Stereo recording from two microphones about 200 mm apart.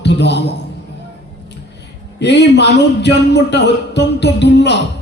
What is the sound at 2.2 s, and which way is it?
A man's voice, 60° left (ahead or behind).